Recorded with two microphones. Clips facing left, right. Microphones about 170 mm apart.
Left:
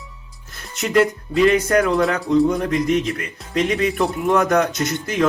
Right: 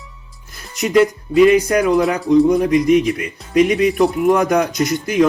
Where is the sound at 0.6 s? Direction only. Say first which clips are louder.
Right 3 dB; centre (ahead or behind).